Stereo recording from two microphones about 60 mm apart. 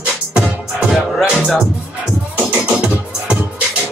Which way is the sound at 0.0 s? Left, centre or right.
Right.